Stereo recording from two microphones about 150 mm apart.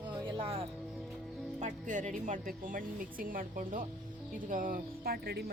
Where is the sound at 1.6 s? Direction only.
55° right (ahead or behind); by 5.5 s 90° right.